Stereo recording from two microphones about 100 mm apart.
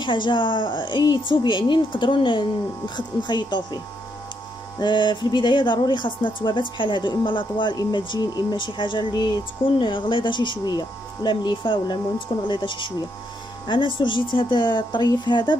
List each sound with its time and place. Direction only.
0.0 s speech: 50° left (ahead or behind)
4.7 s speech: 50° left (ahead or behind)